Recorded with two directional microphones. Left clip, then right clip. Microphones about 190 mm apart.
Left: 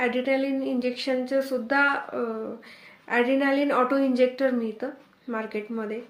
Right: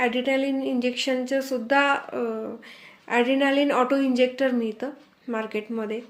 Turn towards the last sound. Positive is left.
turn(degrees=-25)  # may be behind; listen again after turning